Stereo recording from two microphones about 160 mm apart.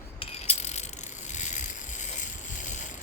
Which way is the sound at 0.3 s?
45° left (ahead or behind).